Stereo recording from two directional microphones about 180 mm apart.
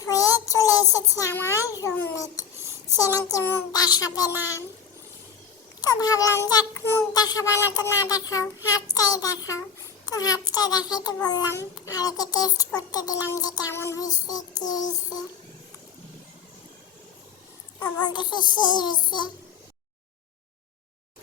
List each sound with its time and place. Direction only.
0.0 s child singing: 20° left (ahead or behind)
3.2 s a child's voice: 20° left (ahead or behind)
5.8 s a child's voice: 20° left (ahead or behind)
6.5 s child singing: 20° left (ahead or behind)
7.1 s a child's voice: 20° left (ahead or behind)
17.7 s a child's voice: 20° left (ahead or behind)